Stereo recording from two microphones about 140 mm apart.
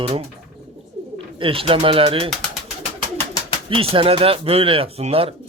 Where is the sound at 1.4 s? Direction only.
40° right (ahead or behind).